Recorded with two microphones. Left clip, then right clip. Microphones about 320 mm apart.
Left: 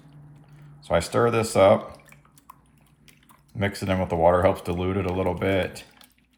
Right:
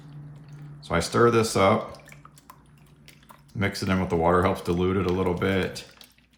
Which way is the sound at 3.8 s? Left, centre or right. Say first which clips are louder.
Left 4 dB; centre.